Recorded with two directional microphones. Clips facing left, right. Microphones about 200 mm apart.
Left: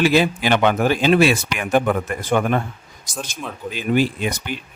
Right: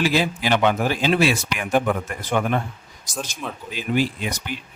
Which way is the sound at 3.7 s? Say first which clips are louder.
Left 4 dB; 55° left (ahead or behind).